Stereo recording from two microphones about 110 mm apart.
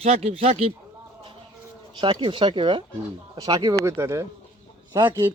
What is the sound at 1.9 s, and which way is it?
Speech, 45° right (ahead or behind).